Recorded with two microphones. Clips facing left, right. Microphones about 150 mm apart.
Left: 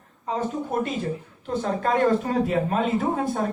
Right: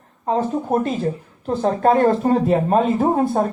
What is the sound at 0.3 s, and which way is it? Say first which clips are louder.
Speech: right 7 dB; 40° right (ahead or behind).